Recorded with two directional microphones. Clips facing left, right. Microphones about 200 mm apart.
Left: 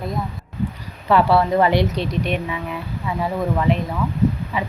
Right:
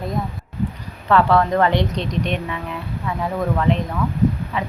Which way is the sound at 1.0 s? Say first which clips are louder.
Even; 10° left (ahead or behind).